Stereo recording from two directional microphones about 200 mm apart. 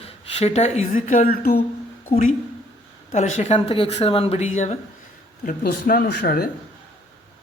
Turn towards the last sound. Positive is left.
turn(degrees=50)  # may be behind; listen again after turning